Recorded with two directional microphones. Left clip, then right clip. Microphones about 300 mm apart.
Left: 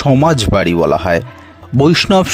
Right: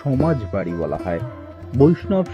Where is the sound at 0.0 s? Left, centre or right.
Left.